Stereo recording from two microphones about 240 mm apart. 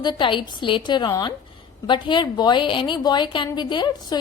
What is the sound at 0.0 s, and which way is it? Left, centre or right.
A woman's voice, centre.